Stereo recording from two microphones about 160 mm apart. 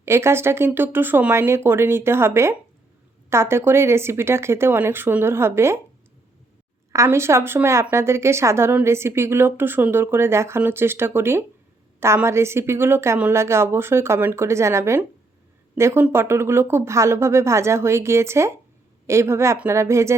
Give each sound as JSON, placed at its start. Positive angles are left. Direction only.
{"t": 0.0, "sound": "speech", "side_deg": -15}
{"t": 6.9, "sound": "speech", "side_deg": -15}